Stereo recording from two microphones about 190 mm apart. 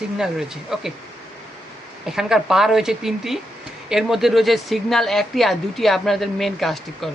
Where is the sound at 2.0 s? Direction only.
Centre (ahead or behind).